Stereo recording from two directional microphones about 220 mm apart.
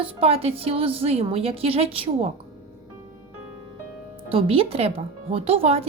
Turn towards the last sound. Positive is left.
turn(degrees=-25)  # may be behind; listen again after turning